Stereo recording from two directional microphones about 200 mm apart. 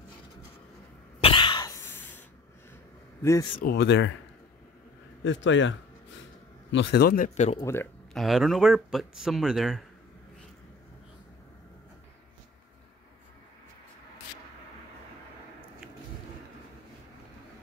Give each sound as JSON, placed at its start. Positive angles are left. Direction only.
{"t": 1.2, "sound": "throat clearing", "side_deg": 25}
{"t": 3.2, "sound": "a man's voice", "side_deg": 15}
{"t": 3.6, "sound": "speech", "side_deg": 60}
{"t": 5.2, "sound": "speech", "side_deg": 70}
{"t": 7.6, "sound": "speech", "side_deg": 10}